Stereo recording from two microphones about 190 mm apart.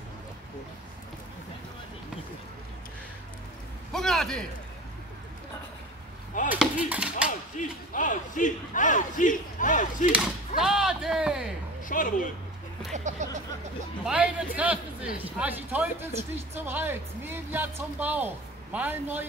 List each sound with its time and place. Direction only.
3.9 s a man's voice: centre (ahead or behind)
6.5 s chop: 5° right (ahead or behind)
7.2 s speech: 45° left (ahead or behind)
10.1 s speech: 5° right (ahead or behind)
11.9 s speech: 45° left (ahead or behind)
12.9 s a sound: 40° right (ahead or behind)
14.0 s speech: 5° right (ahead or behind)